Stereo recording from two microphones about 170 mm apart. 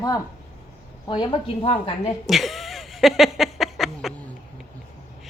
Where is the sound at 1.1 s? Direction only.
30° left (ahead or behind).